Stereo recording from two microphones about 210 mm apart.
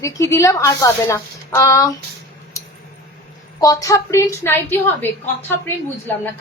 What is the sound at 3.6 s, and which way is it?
A woman's voice, 15° left (ahead or behind).